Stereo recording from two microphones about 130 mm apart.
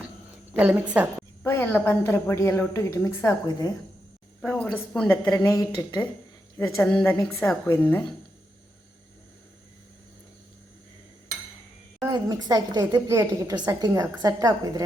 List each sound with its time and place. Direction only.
0.5 s a woman's voice: 10° right (ahead or behind)
1.5 s a woman's voice: 15° left (ahead or behind)
4.4 s a woman's voice: 10° left (ahead or behind)
5.3 s a woman's voice: 25° left (ahead or behind)
11.9 s a woman's voice: 30° right (ahead or behind)